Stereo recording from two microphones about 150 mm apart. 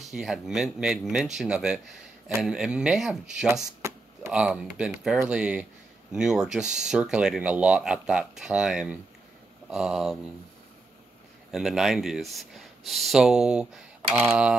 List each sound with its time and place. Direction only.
0.0 s speech: centre (ahead or behind)
3.8 s a sound: 20° right (ahead or behind)
4.3 s speech: 5° right (ahead or behind)
11.5 s speech: centre (ahead or behind)